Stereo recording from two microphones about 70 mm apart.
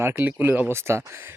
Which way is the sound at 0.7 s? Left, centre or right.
Right.